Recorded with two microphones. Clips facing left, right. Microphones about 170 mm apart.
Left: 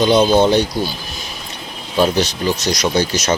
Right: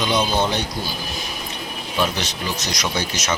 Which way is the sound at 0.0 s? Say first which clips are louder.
Left 8 dB; 30° left (ahead or behind).